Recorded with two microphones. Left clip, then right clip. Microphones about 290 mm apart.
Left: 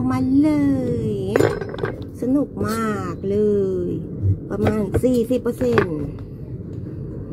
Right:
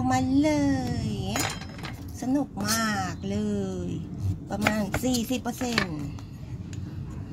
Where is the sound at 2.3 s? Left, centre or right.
Right.